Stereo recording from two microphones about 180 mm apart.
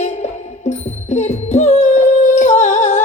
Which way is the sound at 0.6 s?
40° left (ahead or behind).